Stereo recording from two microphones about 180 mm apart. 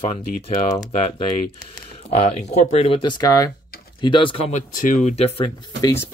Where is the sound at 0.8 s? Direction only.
20° left (ahead or behind).